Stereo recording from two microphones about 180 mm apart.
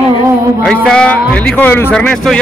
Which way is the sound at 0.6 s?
5° left (ahead or behind).